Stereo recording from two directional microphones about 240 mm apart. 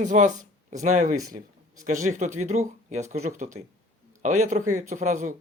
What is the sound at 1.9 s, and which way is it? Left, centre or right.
A man's voice, right.